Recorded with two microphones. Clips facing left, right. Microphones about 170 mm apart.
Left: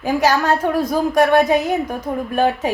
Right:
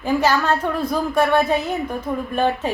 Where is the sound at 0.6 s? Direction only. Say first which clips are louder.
Left 4 dB; 40° left (ahead or behind).